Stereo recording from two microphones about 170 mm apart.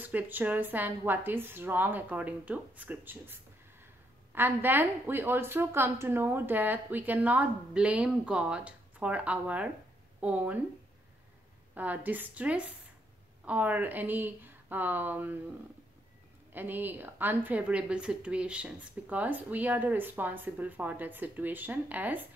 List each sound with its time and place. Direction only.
0.0 s a woman's voice: 10° right (ahead or behind)
11.7 s a woman's voice: 10° right (ahead or behind)
16.5 s a woman's voice: 10° right (ahead or behind)